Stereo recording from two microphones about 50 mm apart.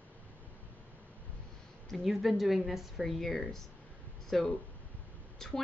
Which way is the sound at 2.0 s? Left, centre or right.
Centre.